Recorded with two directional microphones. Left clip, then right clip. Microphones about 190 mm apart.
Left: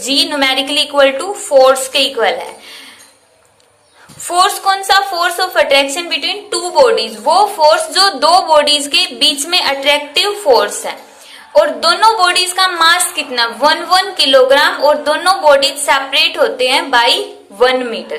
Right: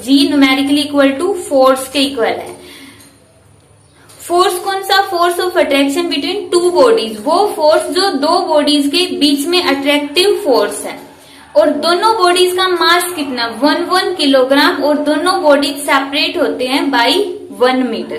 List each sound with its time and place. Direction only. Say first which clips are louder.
0.0 s a woman's voice: right 2 dB; 30° left (ahead or behind)
4.3 s a woman's voice: left 1 dB; 30° left (ahead or behind)